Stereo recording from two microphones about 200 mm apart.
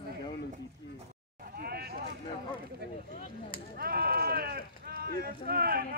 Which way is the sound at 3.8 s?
50° right (ahead or behind).